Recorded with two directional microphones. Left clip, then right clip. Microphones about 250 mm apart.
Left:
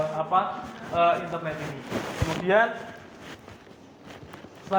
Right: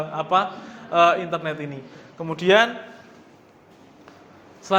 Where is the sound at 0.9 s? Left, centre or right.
Right.